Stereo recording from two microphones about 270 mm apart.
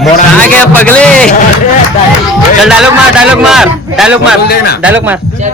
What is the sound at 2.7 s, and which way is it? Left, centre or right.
A man's voice, centre.